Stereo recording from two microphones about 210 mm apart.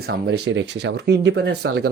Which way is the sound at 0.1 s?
55° right (ahead or behind).